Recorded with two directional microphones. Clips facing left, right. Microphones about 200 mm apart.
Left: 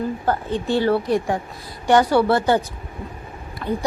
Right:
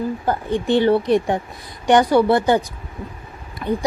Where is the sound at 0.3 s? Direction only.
15° right (ahead or behind).